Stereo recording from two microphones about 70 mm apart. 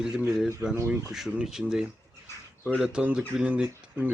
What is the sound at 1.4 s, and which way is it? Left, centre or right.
Speech, centre.